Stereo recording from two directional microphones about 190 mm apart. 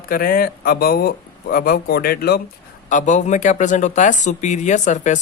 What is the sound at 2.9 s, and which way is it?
Speech, 40° left (ahead or behind).